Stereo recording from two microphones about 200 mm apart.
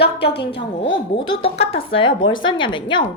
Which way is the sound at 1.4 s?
30° left (ahead or behind).